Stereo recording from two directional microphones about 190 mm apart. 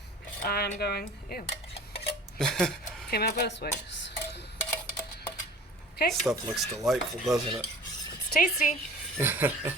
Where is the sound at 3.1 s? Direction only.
55° left (ahead or behind).